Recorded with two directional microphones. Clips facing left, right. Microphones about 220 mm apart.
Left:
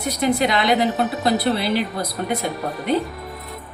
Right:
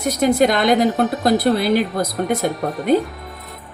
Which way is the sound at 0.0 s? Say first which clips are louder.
Right 4 dB; 45° right (ahead or behind).